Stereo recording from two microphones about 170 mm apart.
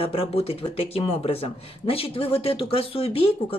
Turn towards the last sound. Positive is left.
turn(degrees=35)  # may be behind; listen again after turning